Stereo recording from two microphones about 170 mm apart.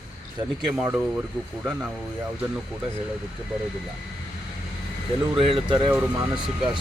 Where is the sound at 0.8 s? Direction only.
10° right (ahead or behind).